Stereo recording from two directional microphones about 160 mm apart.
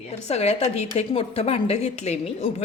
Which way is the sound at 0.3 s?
40° left (ahead or behind).